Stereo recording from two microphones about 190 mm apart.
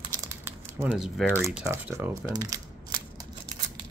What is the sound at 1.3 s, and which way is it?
Speech, 15° right (ahead or behind).